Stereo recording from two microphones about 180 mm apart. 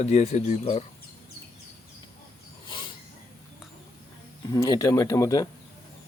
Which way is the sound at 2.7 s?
25° left (ahead or behind).